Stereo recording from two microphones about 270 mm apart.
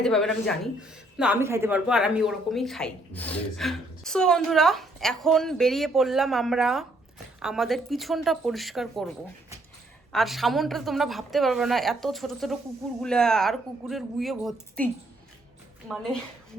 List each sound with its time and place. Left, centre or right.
0.0 s a woman's voice: centre
15.9 s a woman's voice: centre